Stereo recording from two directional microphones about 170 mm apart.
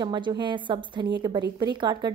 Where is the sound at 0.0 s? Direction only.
25° right (ahead or behind).